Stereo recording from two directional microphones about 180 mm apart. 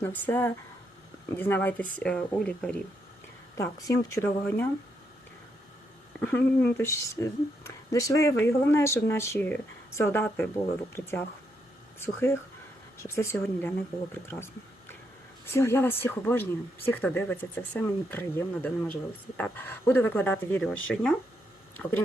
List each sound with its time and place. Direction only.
0.0 s speech: 10° left (ahead or behind)
3.6 s speech: 20° left (ahead or behind)
6.1 s speech: 10° left (ahead or behind)